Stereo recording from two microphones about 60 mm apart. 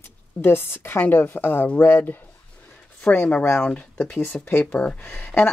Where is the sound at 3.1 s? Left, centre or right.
Left.